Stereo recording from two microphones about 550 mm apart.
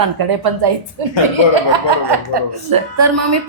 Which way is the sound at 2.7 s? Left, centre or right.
Right.